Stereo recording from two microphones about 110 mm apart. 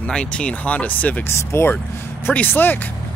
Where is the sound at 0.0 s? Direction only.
10° left (ahead or behind).